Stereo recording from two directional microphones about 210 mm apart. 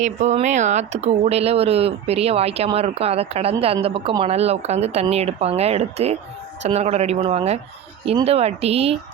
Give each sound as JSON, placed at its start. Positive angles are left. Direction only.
{"t": 0.0, "sound": "speech", "side_deg": -35}